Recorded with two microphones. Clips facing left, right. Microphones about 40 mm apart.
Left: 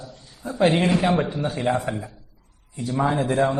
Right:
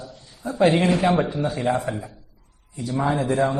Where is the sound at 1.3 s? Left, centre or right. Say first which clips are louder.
Right 1 dB; left.